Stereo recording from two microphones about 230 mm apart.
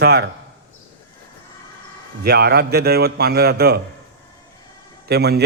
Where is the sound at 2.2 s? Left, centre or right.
Right.